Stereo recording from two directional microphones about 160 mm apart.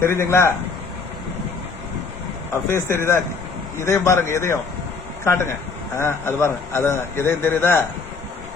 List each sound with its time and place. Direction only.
0.0 s a man's voice: 15° left (ahead or behind)
2.5 s a man's voice: 15° left (ahead or behind)